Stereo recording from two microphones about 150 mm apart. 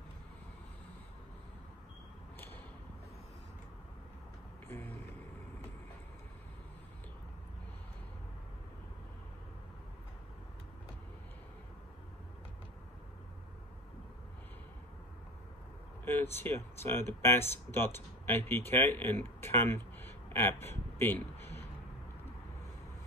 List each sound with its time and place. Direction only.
2.3 s a sound: 15° left (ahead or behind)
4.6 s music: 15° left (ahead or behind)
16.2 s speech: 15° left (ahead or behind)